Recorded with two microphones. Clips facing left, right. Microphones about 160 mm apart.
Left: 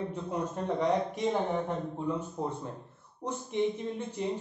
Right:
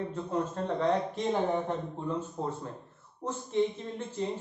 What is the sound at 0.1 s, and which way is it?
A man's voice, 15° left (ahead or behind).